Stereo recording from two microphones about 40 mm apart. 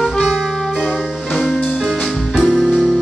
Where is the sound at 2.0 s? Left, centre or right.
Centre.